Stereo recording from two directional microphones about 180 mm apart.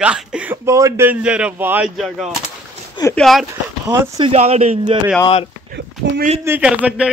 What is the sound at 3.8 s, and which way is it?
Speech, 20° right (ahead or behind).